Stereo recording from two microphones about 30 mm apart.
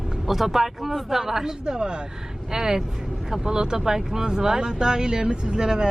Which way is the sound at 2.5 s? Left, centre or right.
Centre.